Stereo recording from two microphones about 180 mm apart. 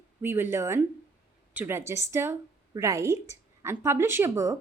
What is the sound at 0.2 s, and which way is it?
A woman's voice, 10° right (ahead or behind).